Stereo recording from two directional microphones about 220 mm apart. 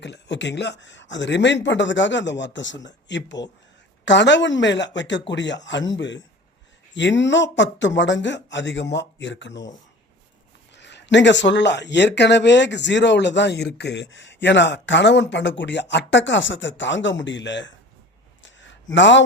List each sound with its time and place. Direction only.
0.0 s speech: 55° left (ahead or behind)
10.8 s speech: 50° left (ahead or behind)
18.4 s a sound: 55° left (ahead or behind)
18.9 s speech: 55° left (ahead or behind)